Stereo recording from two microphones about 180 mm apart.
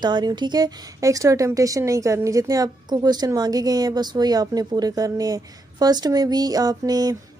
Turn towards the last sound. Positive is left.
turn(degrees=-20)  # may be behind; listen again after turning